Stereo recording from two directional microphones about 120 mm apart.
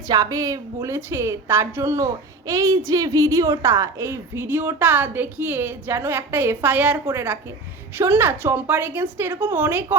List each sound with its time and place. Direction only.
0.1 s a woman's voice: 30° right (ahead or behind)